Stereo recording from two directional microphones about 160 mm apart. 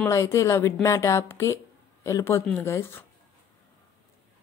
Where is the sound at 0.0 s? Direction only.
20° left (ahead or behind).